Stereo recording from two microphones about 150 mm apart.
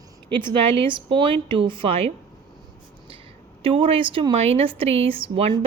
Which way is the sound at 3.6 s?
35° right (ahead or behind).